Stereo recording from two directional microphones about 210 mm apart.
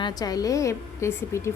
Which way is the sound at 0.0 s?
20° left (ahead or behind).